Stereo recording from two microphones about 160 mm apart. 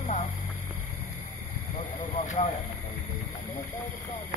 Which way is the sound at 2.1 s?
50° left (ahead or behind).